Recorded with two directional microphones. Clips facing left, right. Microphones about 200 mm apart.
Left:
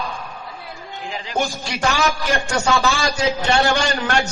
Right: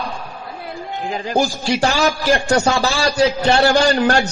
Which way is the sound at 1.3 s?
35° right (ahead or behind).